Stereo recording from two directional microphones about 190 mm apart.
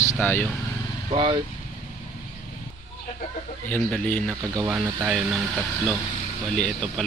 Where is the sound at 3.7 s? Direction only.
5° left (ahead or behind).